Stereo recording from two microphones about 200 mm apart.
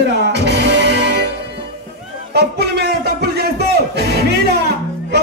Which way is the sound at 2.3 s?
55° right (ahead or behind).